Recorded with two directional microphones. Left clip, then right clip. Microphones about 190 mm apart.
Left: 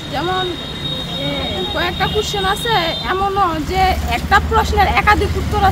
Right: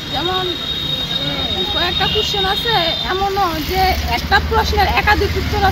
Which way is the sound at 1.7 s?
20° left (ahead or behind).